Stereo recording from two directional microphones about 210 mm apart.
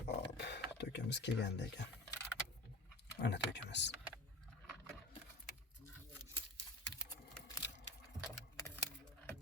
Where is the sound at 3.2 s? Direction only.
55° left (ahead or behind).